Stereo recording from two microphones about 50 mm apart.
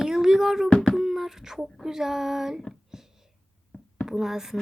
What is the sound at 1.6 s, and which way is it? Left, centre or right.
Speech, centre.